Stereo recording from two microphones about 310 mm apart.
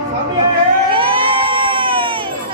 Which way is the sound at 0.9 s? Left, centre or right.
Centre.